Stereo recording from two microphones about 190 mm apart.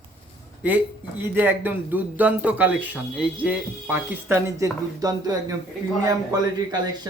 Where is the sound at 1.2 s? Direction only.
10° right (ahead or behind).